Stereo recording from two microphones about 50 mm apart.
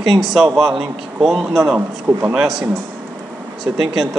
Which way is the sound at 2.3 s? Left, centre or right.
Centre.